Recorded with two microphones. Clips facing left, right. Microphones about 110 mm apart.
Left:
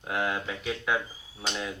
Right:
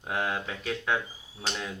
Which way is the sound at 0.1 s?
5° left (ahead or behind).